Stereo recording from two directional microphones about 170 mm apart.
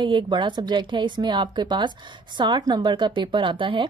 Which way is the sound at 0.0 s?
30° right (ahead or behind).